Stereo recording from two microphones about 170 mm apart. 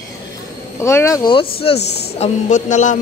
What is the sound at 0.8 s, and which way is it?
Speech, 15° left (ahead or behind).